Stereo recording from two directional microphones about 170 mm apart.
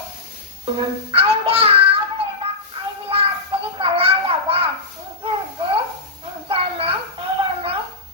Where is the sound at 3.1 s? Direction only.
30° right (ahead or behind).